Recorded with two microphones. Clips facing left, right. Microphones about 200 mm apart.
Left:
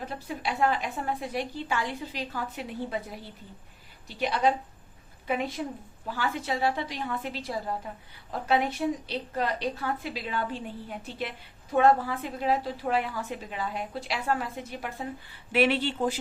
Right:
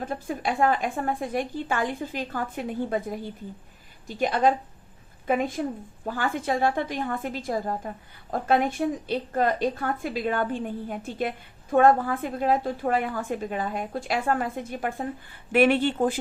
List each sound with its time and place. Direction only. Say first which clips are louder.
0.0 s a woman's voice: right 5 dB; 50° right (ahead or behind)